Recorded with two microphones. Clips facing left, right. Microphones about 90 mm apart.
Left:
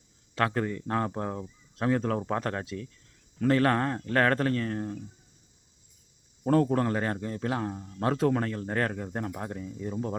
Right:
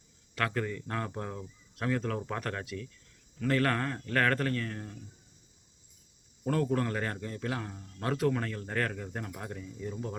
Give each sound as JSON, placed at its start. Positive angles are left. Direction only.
{"t": 0.3, "sound": "a man's voice", "side_deg": 30}
{"t": 6.4, "sound": "a man's voice", "side_deg": 35}